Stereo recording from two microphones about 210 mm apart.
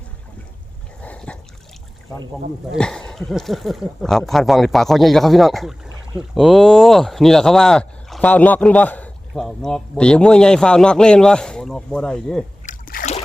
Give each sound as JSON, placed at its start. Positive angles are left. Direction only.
{"t": 1.0, "sound": "a sound", "side_deg": 5}
{"t": 2.7, "sound": "speech", "side_deg": 5}
{"t": 12.6, "sound": "splash", "side_deg": 40}